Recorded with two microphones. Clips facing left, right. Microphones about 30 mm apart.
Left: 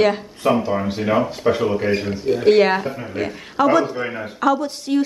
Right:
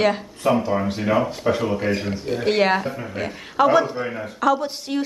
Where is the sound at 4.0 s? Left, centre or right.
Centre.